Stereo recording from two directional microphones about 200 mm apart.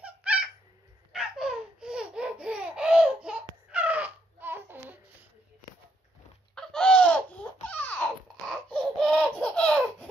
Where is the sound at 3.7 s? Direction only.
5° right (ahead or behind).